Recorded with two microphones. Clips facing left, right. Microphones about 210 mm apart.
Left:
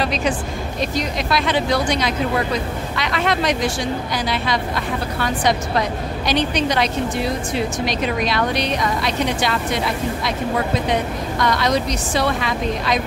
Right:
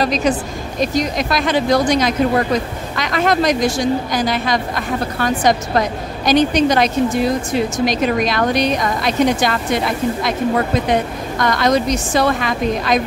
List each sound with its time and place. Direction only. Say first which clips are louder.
0.0 s speech: right 4 dB; 40° right (ahead or behind)
11.4 s speech: right 4 dB; 50° right (ahead or behind)